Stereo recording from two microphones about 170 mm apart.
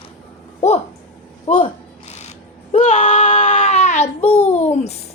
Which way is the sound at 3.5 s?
40° left (ahead or behind).